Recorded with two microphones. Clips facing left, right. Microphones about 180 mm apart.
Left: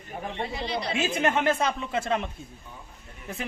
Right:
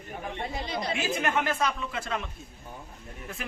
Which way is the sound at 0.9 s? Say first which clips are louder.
Left 3 dB; 25° left (ahead or behind).